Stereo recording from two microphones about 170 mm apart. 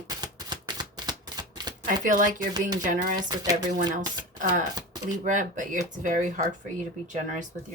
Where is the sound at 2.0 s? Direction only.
50° right (ahead or behind).